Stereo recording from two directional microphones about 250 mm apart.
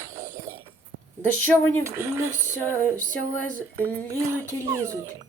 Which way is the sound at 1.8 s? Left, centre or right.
Centre.